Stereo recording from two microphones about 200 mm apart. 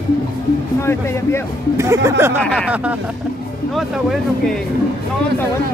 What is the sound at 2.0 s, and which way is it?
Speech, 10° right (ahead or behind).